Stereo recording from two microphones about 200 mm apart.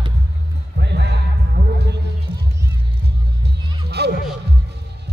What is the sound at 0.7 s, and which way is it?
Music, 60° right (ahead or behind).